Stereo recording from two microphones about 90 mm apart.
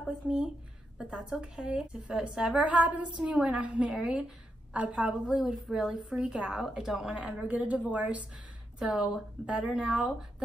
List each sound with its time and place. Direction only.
0.0 s a woman's voice: 10° right (ahead or behind)
2.6 s a woman's voice: 15° right (ahead or behind)
7.2 s speech: 15° right (ahead or behind)
8.7 s speech: 5° right (ahead or behind)